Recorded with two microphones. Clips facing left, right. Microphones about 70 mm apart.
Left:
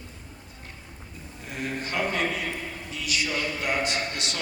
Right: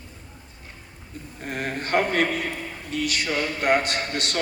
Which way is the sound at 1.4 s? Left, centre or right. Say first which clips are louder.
Right 3 dB; right.